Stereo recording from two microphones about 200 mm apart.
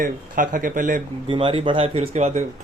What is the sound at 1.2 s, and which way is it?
Speech, 25° right (ahead or behind).